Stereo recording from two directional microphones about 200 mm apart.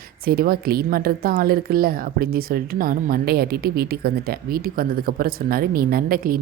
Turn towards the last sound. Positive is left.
turn(degrees=-45)  # may be behind; listen again after turning